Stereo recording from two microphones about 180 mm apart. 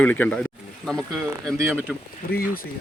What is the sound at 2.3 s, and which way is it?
Speech, 55° left (ahead or behind).